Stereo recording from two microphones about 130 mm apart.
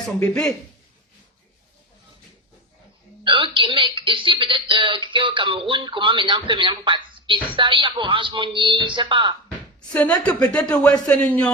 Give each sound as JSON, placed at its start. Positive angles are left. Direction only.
{"t": 3.2, "sound": "speech", "side_deg": -40}
{"t": 9.9, "sound": "a woman's voice", "side_deg": 10}